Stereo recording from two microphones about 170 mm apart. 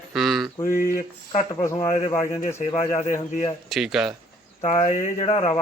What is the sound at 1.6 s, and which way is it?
Speech, 15° left (ahead or behind).